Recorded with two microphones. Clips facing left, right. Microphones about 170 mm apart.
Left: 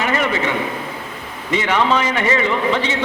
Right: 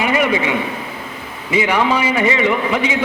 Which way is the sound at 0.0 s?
10° right (ahead or behind).